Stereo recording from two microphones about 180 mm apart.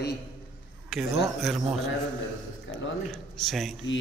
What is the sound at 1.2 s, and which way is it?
Speech, centre (ahead or behind).